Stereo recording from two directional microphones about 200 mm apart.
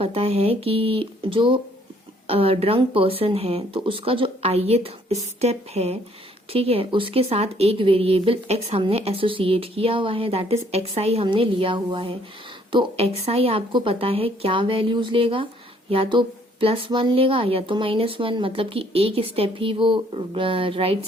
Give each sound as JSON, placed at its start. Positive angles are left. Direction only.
{"t": 0.0, "sound": "speech", "side_deg": -30}